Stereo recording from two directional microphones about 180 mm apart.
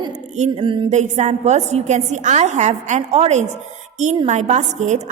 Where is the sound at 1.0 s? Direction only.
40° right (ahead or behind).